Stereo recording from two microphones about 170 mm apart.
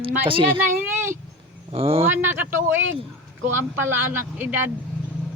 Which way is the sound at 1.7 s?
35° right (ahead or behind).